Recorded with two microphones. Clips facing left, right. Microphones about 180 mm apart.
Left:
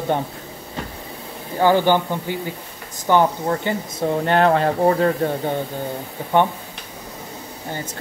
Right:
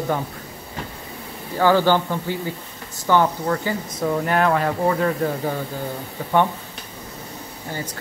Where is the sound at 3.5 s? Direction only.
30° left (ahead or behind).